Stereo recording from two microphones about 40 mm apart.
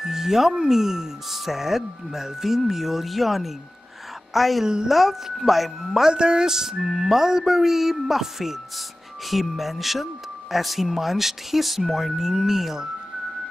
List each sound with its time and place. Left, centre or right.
0.0 s a woman's voice: centre
4.6 s speech: centre
4.9 s speech: centre
6.1 s speech: centre